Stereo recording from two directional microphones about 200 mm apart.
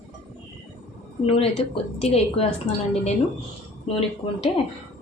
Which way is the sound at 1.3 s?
30° left (ahead or behind).